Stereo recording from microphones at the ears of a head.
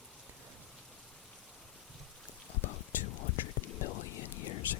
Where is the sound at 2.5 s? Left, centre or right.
Left.